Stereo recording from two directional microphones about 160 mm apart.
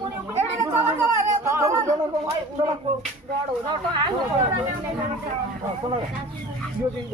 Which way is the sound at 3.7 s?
30° right (ahead or behind).